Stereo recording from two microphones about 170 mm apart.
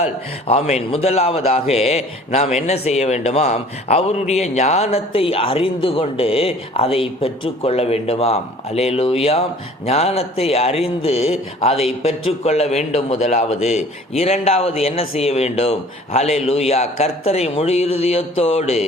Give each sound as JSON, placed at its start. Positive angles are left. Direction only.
{"t": 0.0, "sound": "speech", "side_deg": 40}